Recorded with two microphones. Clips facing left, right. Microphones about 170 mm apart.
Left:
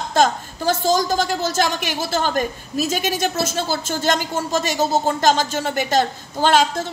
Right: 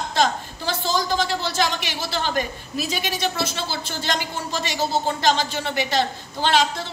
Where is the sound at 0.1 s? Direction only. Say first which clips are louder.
Left 5 dB; 45° left (ahead or behind).